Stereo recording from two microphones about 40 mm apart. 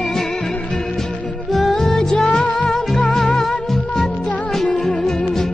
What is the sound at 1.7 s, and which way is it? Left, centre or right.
Music, centre.